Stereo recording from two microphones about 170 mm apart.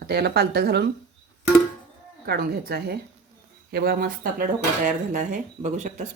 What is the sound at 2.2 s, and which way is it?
Speech, 65° right (ahead or behind).